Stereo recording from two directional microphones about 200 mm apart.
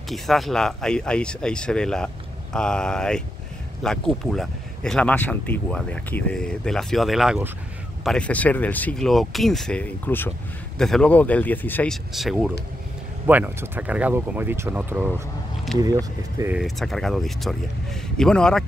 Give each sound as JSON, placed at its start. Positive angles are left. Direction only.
{"t": 0.1, "sound": "speech", "side_deg": 0}
{"t": 16.5, "sound": "speech", "side_deg": 0}